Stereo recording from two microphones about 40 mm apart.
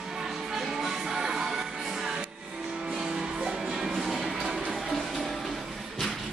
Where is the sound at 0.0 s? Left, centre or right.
Centre.